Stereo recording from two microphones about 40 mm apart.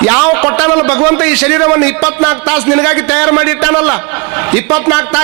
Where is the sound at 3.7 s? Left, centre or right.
Centre.